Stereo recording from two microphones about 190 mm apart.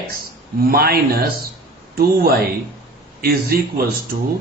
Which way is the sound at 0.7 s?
55° right (ahead or behind).